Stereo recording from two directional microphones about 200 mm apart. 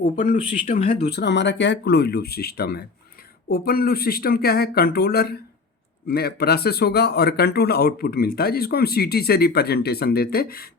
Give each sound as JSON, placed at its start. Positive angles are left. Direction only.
{"t": 0.3, "sound": "speech", "side_deg": 30}
{"t": 1.0, "sound": "speech", "side_deg": 55}